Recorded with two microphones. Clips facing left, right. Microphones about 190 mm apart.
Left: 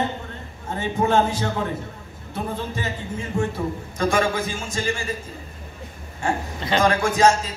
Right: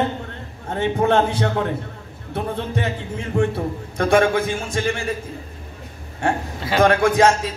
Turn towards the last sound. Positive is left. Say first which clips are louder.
# right 2 dB
turn(degrees=-60)  # may be behind; listen again after turning